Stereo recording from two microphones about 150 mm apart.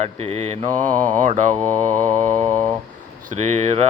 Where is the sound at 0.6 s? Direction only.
25° right (ahead or behind).